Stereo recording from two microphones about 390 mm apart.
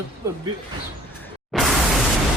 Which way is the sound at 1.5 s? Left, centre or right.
Centre.